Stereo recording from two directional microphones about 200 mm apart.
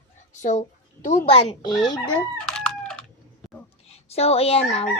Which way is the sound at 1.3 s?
30° left (ahead or behind).